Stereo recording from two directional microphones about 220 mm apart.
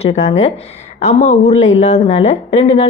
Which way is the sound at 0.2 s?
30° left (ahead or behind).